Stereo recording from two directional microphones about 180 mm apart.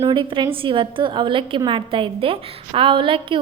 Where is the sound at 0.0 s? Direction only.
30° right (ahead or behind).